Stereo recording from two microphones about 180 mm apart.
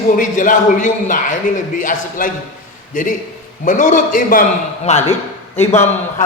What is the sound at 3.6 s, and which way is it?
Speech, 45° left (ahead or behind).